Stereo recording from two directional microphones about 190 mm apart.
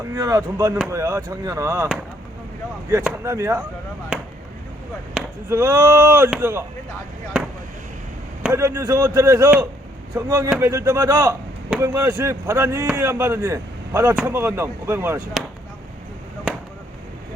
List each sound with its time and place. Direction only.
0.1 s speech: 15° right (ahead or behind)
2.9 s speech: 15° right (ahead or behind)
5.5 s speech: 15° right (ahead or behind)
8.4 s speech: 15° right (ahead or behind)